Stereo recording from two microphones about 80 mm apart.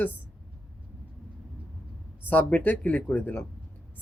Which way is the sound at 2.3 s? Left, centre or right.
Centre.